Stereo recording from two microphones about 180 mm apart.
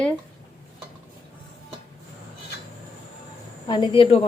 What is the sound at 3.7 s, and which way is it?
Speech, 25° left (ahead or behind).